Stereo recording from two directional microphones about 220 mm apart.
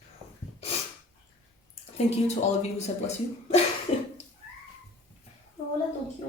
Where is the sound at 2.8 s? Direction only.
30° left (ahead or behind).